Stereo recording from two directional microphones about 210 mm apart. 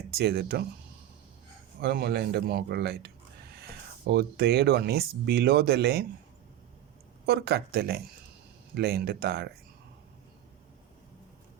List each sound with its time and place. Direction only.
0.1 s speech: 50° right (ahead or behind)
1.8 s speech: 50° right (ahead or behind)
7.3 s speech: 50° right (ahead or behind)